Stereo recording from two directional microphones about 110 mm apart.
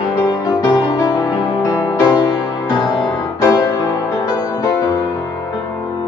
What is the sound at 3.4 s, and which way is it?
Music, 30° left (ahead or behind).